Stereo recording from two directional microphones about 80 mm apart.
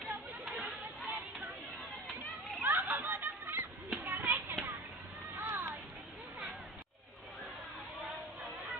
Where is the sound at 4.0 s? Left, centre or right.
Right.